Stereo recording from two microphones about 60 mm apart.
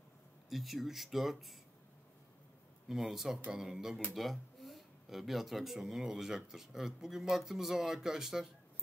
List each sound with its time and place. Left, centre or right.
0.5 s speech: centre
2.9 s speech: centre